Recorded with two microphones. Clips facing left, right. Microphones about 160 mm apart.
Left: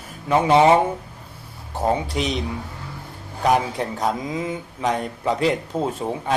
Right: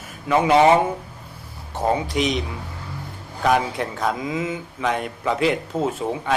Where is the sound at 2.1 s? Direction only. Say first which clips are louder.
Right 2 dB; 35° left (ahead or behind).